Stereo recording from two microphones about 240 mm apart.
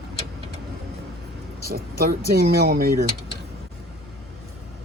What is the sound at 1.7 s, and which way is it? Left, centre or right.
Speech, right.